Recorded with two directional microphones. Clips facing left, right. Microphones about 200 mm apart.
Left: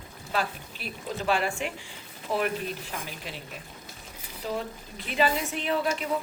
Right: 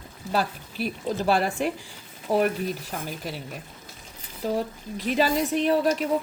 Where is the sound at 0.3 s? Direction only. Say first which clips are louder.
Right 4 dB; 40° right (ahead or behind).